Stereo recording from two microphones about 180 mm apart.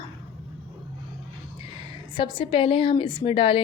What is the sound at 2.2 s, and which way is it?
A woman's voice, 25° left (ahead or behind).